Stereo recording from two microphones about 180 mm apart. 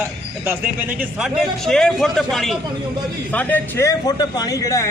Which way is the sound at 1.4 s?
Centre (ahead or behind).